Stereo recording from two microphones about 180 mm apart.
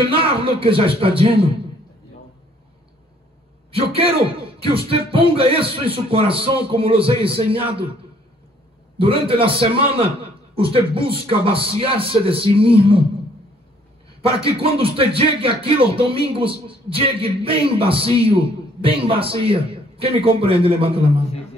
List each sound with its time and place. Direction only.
0.1 s speech: 30° right (ahead or behind)
3.7 s a man's voice: 35° right (ahead or behind)
8.9 s a man's voice: 30° right (ahead or behind)
14.2 s a man's voice: 30° right (ahead or behind)